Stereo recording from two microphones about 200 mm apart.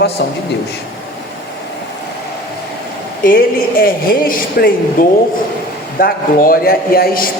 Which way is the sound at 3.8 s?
45° left (ahead or behind).